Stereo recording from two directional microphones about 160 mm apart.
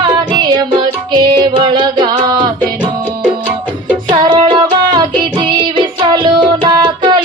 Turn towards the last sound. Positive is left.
turn(degrees=-30)  # may be behind; listen again after turning